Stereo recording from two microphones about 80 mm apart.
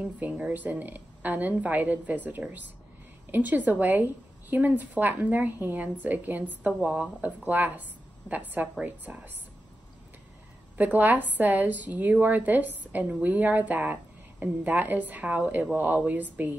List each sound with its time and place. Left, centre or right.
0.0 s a woman's voice: centre
8.8 s a woman's voice: right
10.8 s a woman's voice: right